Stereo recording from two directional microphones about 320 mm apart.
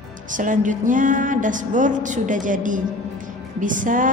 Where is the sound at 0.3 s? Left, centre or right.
Right.